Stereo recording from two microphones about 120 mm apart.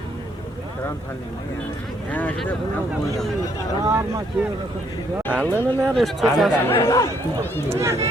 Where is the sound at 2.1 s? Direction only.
15° left (ahead or behind).